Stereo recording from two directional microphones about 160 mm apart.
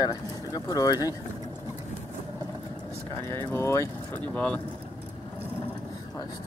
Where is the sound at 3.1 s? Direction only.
15° left (ahead or behind).